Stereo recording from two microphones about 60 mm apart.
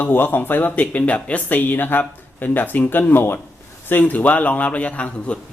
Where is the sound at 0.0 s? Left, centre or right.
Left.